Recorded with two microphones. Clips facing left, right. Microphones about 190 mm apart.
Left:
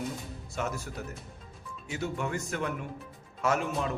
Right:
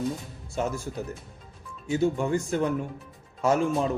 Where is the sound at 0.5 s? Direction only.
30° right (ahead or behind).